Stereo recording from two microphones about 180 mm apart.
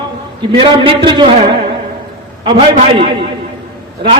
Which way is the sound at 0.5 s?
30° right (ahead or behind).